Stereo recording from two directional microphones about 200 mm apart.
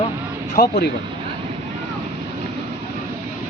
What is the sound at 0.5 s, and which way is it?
Speech, 50° left (ahead or behind).